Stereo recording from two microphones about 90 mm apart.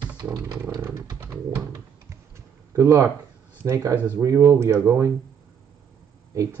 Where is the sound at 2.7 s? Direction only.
30° right (ahead or behind).